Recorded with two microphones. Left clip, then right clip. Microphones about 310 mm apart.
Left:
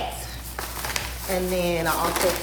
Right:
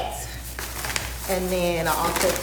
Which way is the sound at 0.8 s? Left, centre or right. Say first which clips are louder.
Right 1 dB; centre.